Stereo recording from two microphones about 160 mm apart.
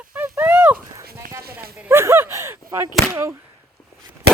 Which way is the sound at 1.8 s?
15° right (ahead or behind).